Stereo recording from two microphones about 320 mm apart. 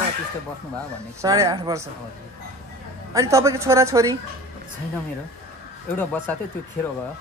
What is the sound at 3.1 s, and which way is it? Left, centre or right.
Speech, centre.